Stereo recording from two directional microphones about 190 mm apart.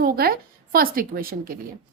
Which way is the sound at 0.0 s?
50° right (ahead or behind).